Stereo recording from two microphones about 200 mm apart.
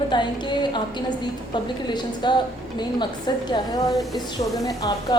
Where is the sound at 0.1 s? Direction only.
20° left (ahead or behind).